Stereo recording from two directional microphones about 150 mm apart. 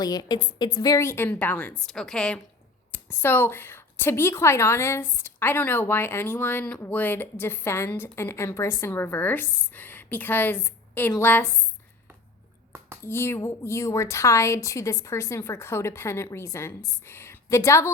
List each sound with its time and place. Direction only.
0.0 s a woman's voice: 25° left (ahead or behind); by 2.4 s 5° left (ahead or behind)
2.9 s a woman's voice: 15° left (ahead or behind)
13.0 s a woman's voice: 15° left (ahead or behind)